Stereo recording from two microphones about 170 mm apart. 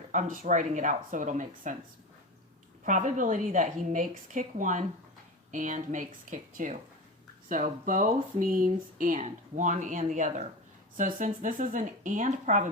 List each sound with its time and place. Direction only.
0.1 s a woman's voice: 45° right (ahead or behind)
2.8 s a woman's voice: 45° right (ahead or behind)